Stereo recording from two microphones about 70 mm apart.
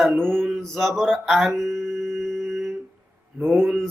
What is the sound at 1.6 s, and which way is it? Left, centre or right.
Humming, centre.